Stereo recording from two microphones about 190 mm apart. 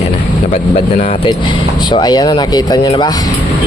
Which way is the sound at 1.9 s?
20° left (ahead or behind).